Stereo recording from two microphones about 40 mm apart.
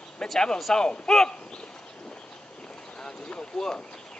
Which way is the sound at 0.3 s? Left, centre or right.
Centre.